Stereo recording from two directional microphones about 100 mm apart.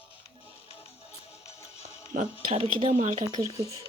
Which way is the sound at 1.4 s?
90° left.